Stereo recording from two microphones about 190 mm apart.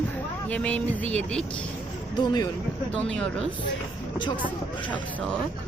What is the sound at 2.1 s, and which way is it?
Speech, 20° left (ahead or behind).